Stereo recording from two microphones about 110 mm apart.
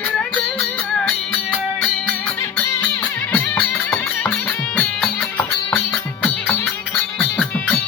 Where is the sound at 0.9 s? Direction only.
5° left (ahead or behind).